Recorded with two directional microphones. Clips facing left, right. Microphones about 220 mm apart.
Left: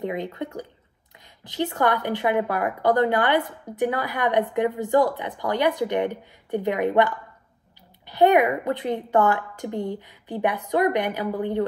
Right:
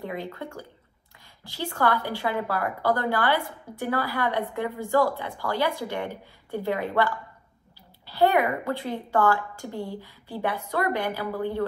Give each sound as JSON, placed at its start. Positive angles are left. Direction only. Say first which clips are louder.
{"t": 0.0, "sound": "a woman's voice", "louder": "left 5 dB", "side_deg": 20}